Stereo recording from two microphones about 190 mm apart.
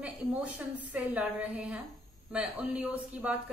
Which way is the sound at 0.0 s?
5° right (ahead or behind).